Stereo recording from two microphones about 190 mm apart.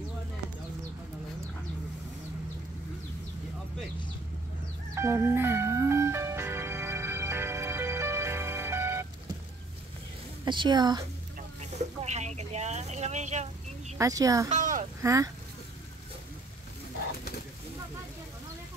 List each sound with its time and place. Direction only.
4.9 s music: 15° right (ahead or behind)
10.4 s a woman's voice: 25° right (ahead or behind)
11.8 s a sound: 35° right (ahead or behind)
13.9 s speech: 15° right (ahead or behind)
14.5 s a sound: 40° right (ahead or behind)
15.0 s speech: 15° right (ahead or behind)